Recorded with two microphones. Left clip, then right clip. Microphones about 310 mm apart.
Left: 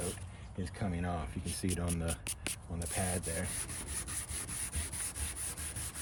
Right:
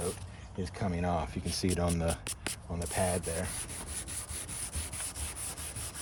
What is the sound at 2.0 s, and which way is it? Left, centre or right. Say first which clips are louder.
Rub: right 5 dB; centre.